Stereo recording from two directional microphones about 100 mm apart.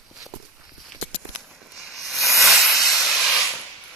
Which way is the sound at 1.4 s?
Centre (ahead or behind).